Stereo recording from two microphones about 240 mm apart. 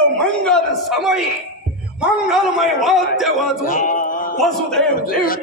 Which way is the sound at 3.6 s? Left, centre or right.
Left.